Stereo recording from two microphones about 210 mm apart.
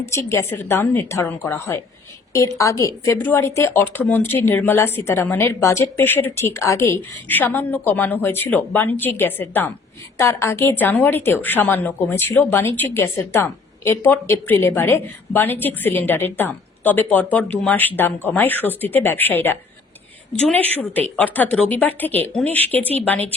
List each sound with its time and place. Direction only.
0.1 s a woman's voice: 15° left (ahead or behind)